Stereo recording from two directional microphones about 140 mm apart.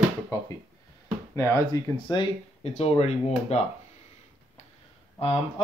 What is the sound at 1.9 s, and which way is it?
Speech, 35° left (ahead or behind).